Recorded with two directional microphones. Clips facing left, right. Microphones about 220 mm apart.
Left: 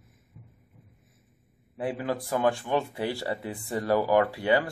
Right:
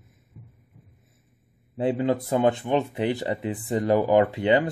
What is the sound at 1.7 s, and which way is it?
Speech, 25° right (ahead or behind).